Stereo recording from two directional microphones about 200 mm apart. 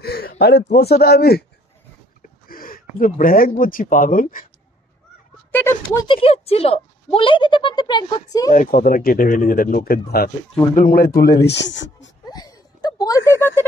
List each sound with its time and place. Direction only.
0.0 s speech: 50° left (ahead or behind)
5.5 s speech: 10° left (ahead or behind)
6.0 s speech: 25° left (ahead or behind)
8.5 s speech: 40° left (ahead or behind); by 12.1 s 65° left (ahead or behind)
12.3 s a sound: 20° left (ahead or behind)